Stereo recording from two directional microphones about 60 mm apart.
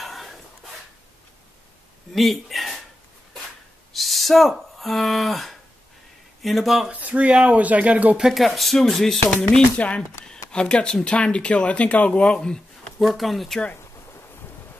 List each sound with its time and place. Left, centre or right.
0.0 s a sound: centre
2.1 s speech: centre
3.9 s speech: centre
6.9 s speech: right
8.2 s speech: centre
9.8 s speech: left
13.0 s speech: centre